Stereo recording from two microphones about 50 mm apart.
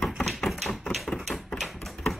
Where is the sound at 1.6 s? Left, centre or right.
Centre.